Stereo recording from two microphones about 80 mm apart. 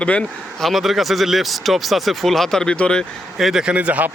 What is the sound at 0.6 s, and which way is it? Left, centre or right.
Speech, centre.